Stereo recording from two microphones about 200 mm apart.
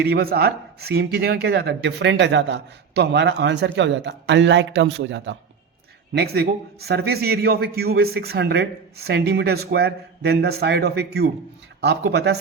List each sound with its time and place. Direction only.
0.0 s speech: 50° right (ahead or behind)
6.1 s a man's voice: 50° right (ahead or behind)